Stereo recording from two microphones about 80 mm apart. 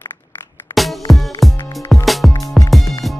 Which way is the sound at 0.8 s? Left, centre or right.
Centre.